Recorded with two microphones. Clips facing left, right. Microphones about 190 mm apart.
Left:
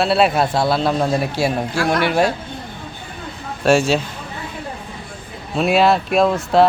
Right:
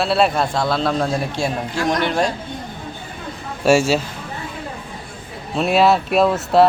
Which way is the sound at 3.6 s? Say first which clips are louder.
Even; 10° right (ahead or behind).